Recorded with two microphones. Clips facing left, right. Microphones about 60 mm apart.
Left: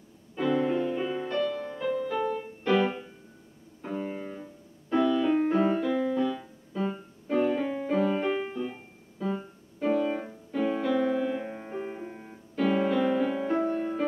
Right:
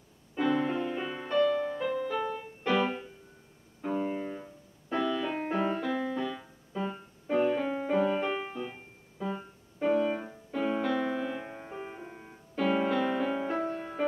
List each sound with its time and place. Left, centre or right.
0.4 s music: centre
3.8 s piano: centre
5.4 s keyboard: centre